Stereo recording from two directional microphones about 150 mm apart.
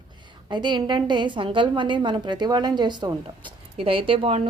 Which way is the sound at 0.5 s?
30° right (ahead or behind).